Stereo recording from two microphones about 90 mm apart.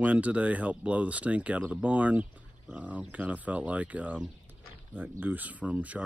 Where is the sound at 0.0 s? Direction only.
15° right (ahead or behind).